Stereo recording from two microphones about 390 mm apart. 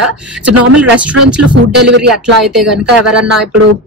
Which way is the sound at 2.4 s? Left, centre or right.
Centre.